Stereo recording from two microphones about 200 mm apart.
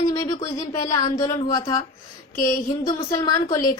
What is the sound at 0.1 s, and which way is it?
A woman's voice, 20° left (ahead or behind).